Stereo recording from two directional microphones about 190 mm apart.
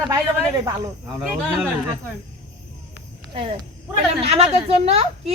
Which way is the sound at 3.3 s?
25° right (ahead or behind).